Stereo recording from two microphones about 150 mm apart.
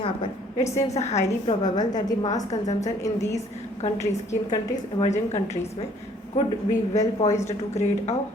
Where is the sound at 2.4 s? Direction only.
50° left (ahead or behind).